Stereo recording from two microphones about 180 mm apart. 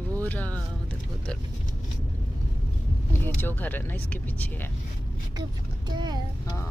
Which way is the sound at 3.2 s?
10° left (ahead or behind).